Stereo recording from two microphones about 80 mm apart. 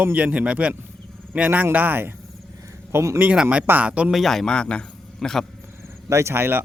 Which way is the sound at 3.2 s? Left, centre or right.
Centre.